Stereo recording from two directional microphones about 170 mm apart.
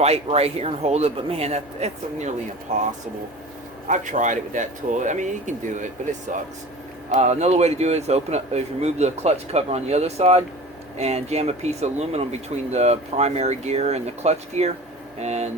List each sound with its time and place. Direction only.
0.0 s speech: 40° right (ahead or behind)